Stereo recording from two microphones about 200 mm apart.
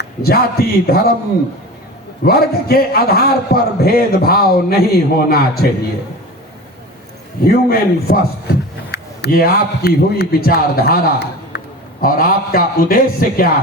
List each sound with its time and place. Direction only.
0.0 s a man's voice: 50° left (ahead or behind)
2.2 s a man's voice: 50° left (ahead or behind)
7.4 s a man's voice: 50° left (ahead or behind)